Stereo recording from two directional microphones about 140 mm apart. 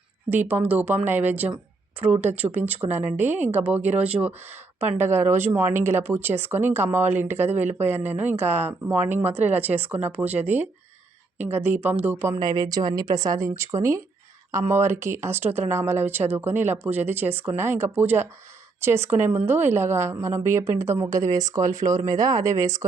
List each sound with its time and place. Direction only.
0.3 s speech: 15° right (ahead or behind)
12.2 s speech: 25° right (ahead or behind)